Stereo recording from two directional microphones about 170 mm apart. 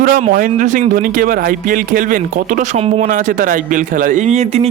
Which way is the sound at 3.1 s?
50° right (ahead or behind).